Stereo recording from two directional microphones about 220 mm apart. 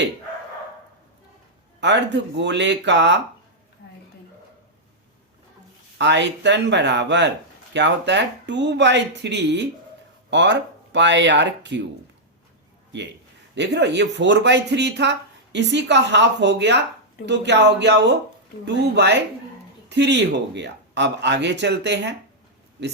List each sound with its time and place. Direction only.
1.8 s speech: 55° right (ahead or behind)
6.0 s speech: 50° right (ahead or behind)
13.6 s speech: 50° right (ahead or behind)